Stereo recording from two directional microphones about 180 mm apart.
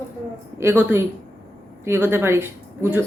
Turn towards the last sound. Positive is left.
turn(degrees=-10)  # may be behind; listen again after turning